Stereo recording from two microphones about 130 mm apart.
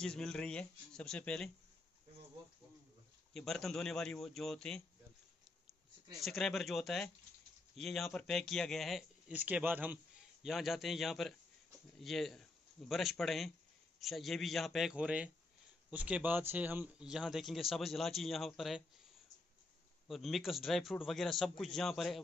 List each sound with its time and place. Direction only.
0.0 s speech: 5° left (ahead or behind)
3.3 s speech: centre (ahead or behind)
6.1 s speech: centre (ahead or behind)
9.3 s speech: 10° right (ahead or behind)
10.4 s speech: centre (ahead or behind)
20.1 s speech: centre (ahead or behind)